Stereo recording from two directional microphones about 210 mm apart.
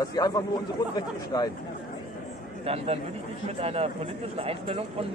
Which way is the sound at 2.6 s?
30° right (ahead or behind).